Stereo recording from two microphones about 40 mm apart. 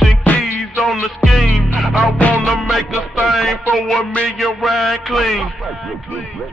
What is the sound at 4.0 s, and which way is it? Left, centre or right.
Music, left.